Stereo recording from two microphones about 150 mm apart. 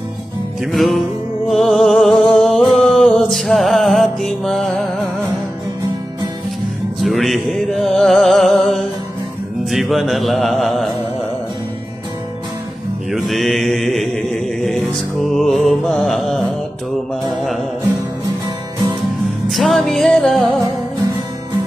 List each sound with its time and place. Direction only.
0.7 s music: centre (ahead or behind)
7.0 s music: centre (ahead or behind)
13.1 s mantra: centre (ahead or behind)
15.2 s music: centre (ahead or behind)
19.5 s music: centre (ahead or behind)